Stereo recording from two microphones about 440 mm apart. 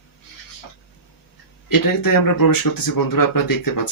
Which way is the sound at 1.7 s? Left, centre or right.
Left.